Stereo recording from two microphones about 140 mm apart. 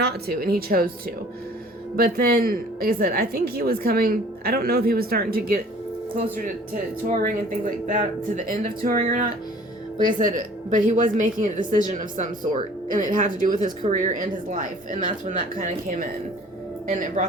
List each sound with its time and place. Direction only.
0.3 s a woman's voice: 90° right
2.0 s a woman's voice: 90° right
7.9 s speech: 70° right (ahead or behind)
16.9 s speech: 65° right (ahead or behind)